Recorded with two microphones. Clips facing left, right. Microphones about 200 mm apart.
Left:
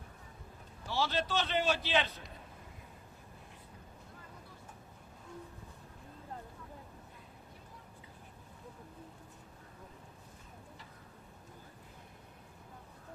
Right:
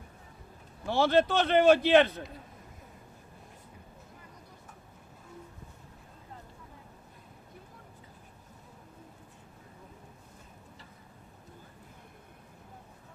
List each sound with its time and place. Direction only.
0.9 s a man's voice: 55° right (ahead or behind)